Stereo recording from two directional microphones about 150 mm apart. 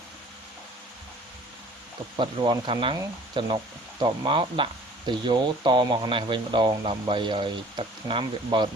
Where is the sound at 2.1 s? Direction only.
30° right (ahead or behind).